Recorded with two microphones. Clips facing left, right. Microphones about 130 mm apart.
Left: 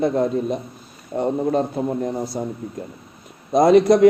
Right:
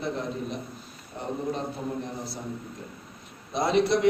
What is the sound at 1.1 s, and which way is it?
Speech, 75° left (ahead or behind).